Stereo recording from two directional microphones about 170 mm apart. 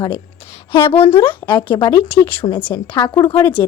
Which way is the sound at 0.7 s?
30° left (ahead or behind).